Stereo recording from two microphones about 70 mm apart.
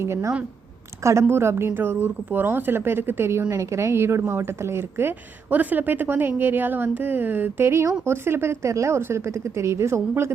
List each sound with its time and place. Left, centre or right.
0.0 s a woman's voice: right
3.5 s a woman's voice: right